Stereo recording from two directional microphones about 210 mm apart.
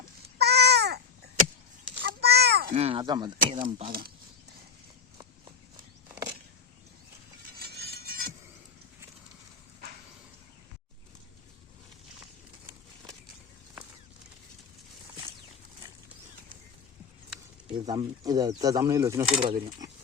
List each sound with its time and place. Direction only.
0.3 s babbling: 50° right (ahead or behind)
2.0 s a sound: 50° right (ahead or behind)
2.6 s speech: 25° right (ahead or behind)
3.8 s speech: 45° right (ahead or behind)
7.6 s a sound: 50° right (ahead or behind)
17.8 s speech: 20° right (ahead or behind)